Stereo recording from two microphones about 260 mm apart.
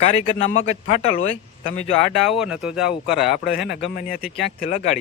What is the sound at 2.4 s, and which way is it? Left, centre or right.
Speech, centre.